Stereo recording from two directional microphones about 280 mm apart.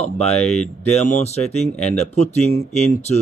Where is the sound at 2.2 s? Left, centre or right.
Left.